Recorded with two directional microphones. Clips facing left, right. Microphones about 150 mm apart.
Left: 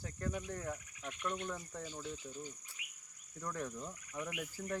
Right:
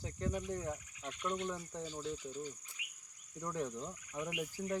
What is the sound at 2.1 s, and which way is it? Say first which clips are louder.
Speech: right 3 dB; 15° left (ahead or behind).